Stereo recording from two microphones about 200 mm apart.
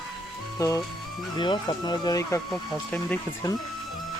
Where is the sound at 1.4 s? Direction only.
20° left (ahead or behind).